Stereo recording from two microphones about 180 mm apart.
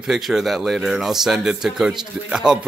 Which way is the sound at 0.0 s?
Centre (ahead or behind).